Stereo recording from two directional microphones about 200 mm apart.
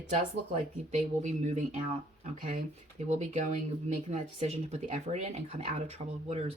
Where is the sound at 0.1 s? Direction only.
35° right (ahead or behind).